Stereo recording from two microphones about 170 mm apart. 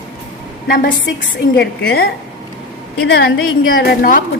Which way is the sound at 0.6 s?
55° left (ahead or behind).